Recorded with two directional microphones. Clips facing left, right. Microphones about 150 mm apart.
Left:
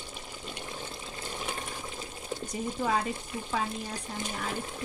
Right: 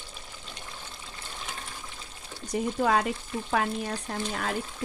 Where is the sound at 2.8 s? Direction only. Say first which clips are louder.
Right 4 dB; 70° right (ahead or behind).